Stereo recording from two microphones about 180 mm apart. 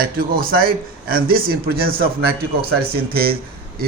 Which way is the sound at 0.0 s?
55° right (ahead or behind).